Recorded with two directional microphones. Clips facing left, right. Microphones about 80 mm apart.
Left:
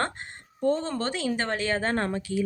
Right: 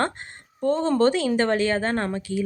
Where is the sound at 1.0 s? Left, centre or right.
Left.